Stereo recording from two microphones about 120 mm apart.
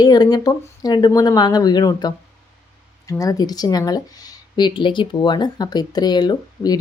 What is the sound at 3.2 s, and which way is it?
Speech, 30° left (ahead or behind).